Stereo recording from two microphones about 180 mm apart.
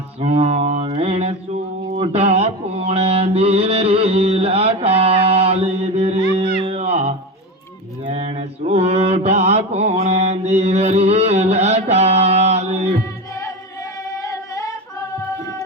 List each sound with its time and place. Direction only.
0.2 s mantra: 35° right (ahead or behind)
14.3 s female singing: 20° left (ahead or behind)